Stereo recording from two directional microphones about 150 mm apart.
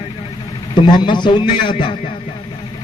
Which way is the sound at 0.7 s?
30° left (ahead or behind).